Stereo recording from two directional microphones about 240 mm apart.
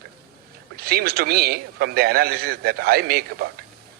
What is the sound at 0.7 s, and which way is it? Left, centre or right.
A man's voice, right.